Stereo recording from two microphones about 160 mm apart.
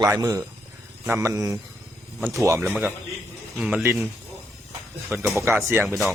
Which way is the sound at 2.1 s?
Centre (ahead or behind).